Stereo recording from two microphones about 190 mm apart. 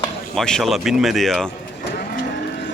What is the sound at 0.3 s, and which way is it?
Speech, centre (ahead or behind).